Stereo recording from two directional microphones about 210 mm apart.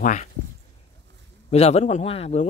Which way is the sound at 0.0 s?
35° left (ahead or behind).